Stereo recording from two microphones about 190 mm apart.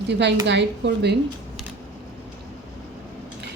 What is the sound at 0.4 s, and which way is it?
Speech, 65° right (ahead or behind).